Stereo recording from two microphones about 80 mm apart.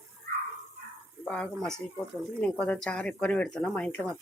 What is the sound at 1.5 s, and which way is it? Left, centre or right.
Speech, centre.